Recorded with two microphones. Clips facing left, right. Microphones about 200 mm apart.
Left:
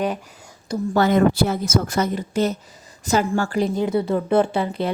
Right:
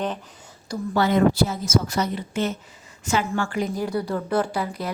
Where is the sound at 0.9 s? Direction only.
50° left (ahead or behind).